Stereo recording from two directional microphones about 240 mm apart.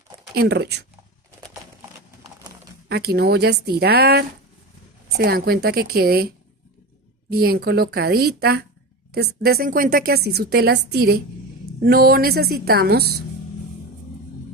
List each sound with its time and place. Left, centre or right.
0.3 s speech: right
2.9 s a woman's voice: right